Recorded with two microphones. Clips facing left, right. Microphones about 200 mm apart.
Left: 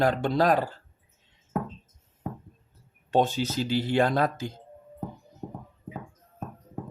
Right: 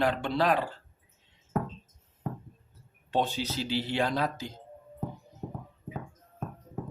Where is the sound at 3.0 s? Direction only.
45° left (ahead or behind).